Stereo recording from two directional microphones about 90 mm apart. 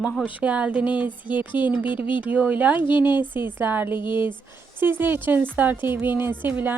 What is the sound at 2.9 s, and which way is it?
Speech, 60° left (ahead or behind).